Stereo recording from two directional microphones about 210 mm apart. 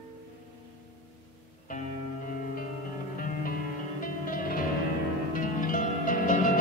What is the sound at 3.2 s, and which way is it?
Music, 45° left (ahead or behind).